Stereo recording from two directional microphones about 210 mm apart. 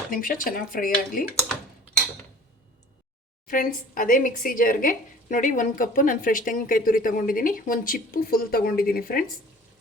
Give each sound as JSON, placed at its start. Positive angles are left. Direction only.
{"t": 0.1, "sound": "speech", "side_deg": 40}
{"t": 3.4, "sound": "speech", "side_deg": 40}